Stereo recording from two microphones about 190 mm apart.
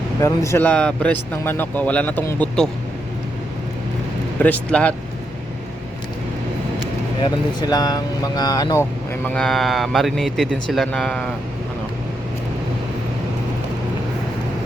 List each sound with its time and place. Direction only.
0.2 s speech: 15° left (ahead or behind)
4.4 s speech: 10° left (ahead or behind)
7.2 s speech: 20° left (ahead or behind); by 11.3 s 5° left (ahead or behind)